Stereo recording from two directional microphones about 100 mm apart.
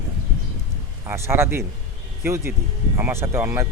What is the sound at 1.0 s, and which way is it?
Speech, 25° right (ahead or behind).